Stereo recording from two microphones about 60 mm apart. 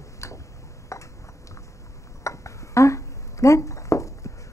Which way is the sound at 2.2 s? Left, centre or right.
Left.